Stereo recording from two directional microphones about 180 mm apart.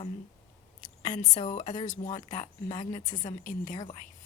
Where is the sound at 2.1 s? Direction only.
20° left (ahead or behind).